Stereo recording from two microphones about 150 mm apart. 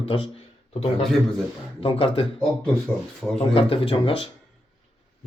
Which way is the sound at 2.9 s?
15° left (ahead or behind).